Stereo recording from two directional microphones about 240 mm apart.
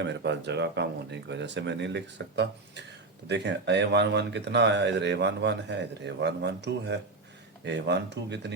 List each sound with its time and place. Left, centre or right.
0.0 s speech: right